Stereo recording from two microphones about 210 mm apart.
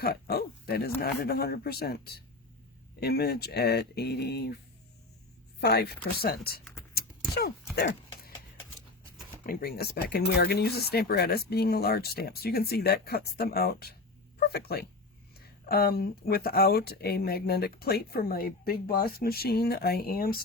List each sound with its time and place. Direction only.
0.0 s speech: 50° left (ahead or behind)
6.9 s a sound: 45° left (ahead or behind)
9.5 s speech: 45° left (ahead or behind)